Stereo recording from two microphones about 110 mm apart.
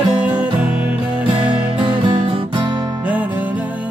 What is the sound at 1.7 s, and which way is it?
Music, 45° right (ahead or behind).